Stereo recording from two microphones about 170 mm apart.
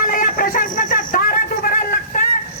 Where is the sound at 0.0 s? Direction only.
55° left (ahead or behind).